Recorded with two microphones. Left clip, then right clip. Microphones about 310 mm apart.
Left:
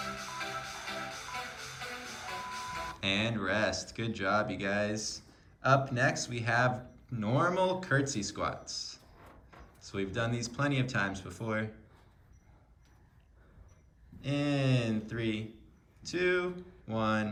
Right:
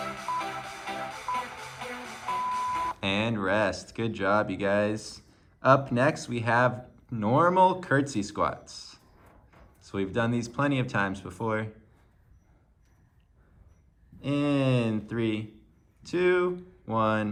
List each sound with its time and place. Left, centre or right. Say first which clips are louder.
0.0 s music: right 7 dB; centre
3.0 s speech: right 4 dB; centre
14.2 s speech: right 5 dB; centre